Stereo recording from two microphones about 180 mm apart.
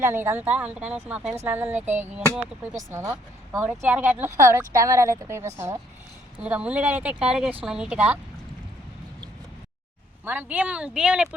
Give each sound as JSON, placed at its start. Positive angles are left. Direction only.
{"t": 0.0, "sound": "a woman's voice", "side_deg": -15}
{"t": 10.2, "sound": "a woman's voice", "side_deg": -10}